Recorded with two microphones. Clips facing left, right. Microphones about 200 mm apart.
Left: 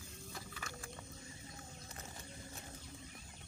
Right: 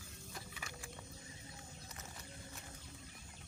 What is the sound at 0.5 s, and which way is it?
Wild animals, 15° right (ahead or behind).